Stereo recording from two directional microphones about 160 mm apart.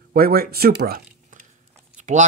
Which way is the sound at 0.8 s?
70° right (ahead or behind).